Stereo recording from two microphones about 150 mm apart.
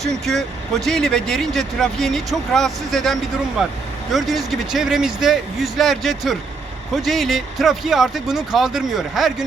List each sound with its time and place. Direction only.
0.0 s speech: centre (ahead or behind)